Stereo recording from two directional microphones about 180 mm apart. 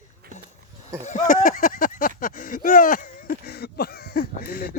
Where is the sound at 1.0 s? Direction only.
45° left (ahead or behind).